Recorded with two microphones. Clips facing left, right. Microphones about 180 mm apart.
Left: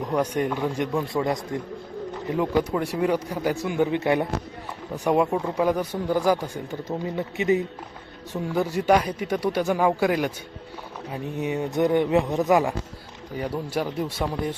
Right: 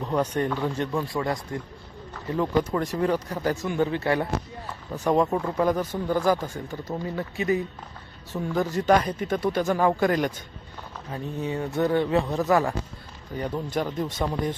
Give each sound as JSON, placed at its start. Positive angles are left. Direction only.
{"t": 0.0, "sound": "speech", "side_deg": 10}
{"t": 11.1, "sound": "speech", "side_deg": 15}